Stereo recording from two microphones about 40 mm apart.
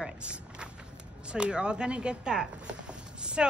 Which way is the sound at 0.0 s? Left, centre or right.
Right.